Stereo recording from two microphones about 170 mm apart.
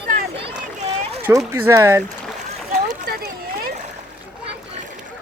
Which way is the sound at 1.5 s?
15° right (ahead or behind).